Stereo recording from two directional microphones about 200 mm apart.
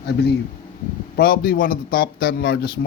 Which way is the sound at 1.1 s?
50° left (ahead or behind).